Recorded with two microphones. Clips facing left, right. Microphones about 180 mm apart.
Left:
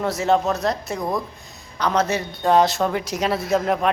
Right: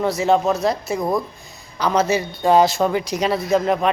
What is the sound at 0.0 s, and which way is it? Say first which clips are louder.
A man's voice: right 2 dB; centre (ahead or behind).